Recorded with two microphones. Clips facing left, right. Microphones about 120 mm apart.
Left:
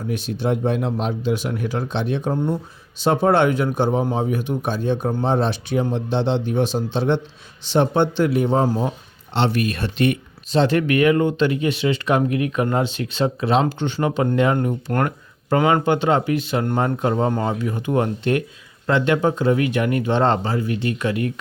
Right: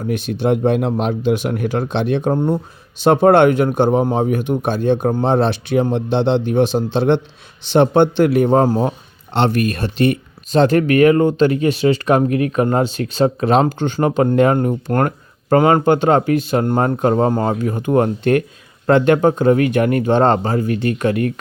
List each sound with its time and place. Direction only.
0.1 s speech: 65° right (ahead or behind)